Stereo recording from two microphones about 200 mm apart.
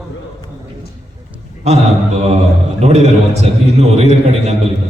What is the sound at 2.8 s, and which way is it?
A man's voice, 30° right (ahead or behind).